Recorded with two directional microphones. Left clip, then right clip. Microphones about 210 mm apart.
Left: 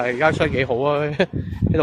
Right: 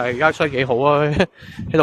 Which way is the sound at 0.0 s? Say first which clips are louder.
Right 1 dB; 15° right (ahead or behind).